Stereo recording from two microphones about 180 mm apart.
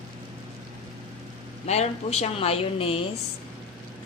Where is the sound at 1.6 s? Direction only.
35° left (ahead or behind).